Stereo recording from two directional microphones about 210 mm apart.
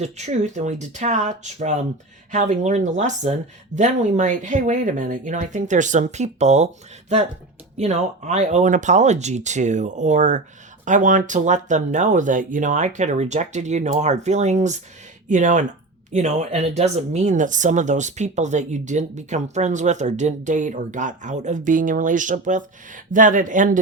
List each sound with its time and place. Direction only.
0.0 s speech: 30° right (ahead or behind)
7.8 s speech: 30° right (ahead or behind)